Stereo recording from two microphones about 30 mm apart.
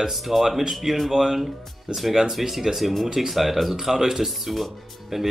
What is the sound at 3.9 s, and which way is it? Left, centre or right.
Speech, centre.